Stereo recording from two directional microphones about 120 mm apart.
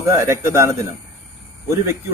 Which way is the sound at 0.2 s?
25° right (ahead or behind).